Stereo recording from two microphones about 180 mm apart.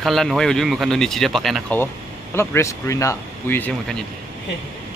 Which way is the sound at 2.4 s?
15° left (ahead or behind).